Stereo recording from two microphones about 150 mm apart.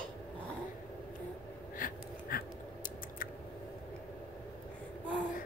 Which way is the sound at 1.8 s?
75° left (ahead or behind).